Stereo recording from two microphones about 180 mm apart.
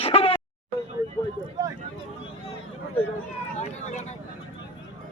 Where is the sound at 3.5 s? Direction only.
40° left (ahead or behind).